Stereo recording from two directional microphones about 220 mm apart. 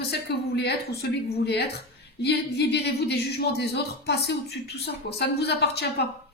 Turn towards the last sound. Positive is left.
turn(degrees=50)  # may be behind; listen again after turning